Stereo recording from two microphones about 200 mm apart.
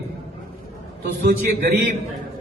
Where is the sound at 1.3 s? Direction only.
50° right (ahead or behind).